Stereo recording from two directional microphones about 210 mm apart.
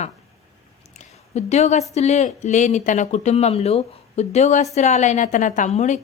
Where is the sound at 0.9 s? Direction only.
30° left (ahead or behind).